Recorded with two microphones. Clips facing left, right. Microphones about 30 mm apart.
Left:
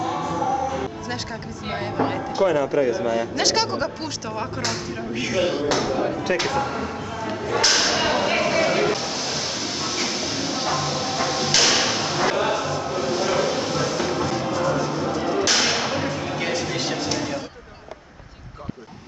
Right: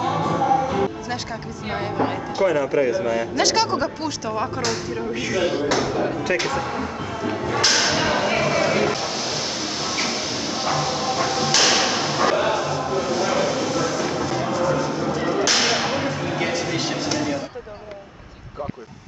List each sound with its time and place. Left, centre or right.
0.2 s music: right
1.7 s speech: centre
7.0 s music: centre
7.5 s whip: centre